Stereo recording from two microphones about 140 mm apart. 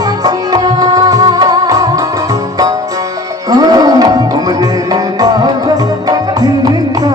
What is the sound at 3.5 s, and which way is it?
Tabla, 25° right (ahead or behind).